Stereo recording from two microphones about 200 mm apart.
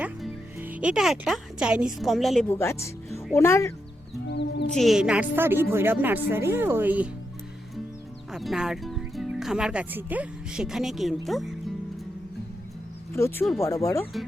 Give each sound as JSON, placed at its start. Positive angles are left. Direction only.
{"t": 0.0, "sound": "speech", "side_deg": -5}
{"t": 4.3, "sound": "music", "side_deg": 60}
{"t": 4.8, "sound": "a woman's voice", "side_deg": 0}
{"t": 8.3, "sound": "speech", "side_deg": 0}
{"t": 13.1, "sound": "speech", "side_deg": 15}